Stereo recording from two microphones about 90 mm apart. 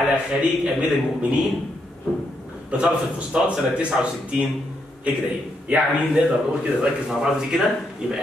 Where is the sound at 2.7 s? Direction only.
10° right (ahead or behind).